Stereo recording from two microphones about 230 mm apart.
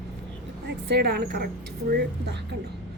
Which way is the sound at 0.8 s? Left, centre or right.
Right.